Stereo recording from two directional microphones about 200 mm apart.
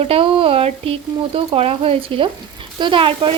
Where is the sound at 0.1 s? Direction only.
25° right (ahead or behind).